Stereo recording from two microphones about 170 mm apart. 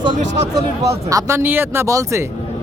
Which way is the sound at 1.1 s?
15° right (ahead or behind).